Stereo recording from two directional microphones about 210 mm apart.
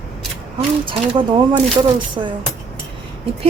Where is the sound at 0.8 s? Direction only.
25° right (ahead or behind).